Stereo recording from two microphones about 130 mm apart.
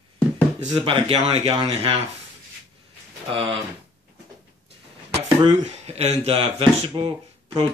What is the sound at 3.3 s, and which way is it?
Speech, 45° right (ahead or behind).